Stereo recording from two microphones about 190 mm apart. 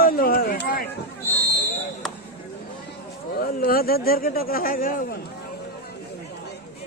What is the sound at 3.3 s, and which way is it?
Speech, 50° left (ahead or behind).